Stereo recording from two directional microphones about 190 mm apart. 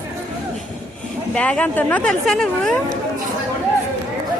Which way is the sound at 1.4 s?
5° left (ahead or behind).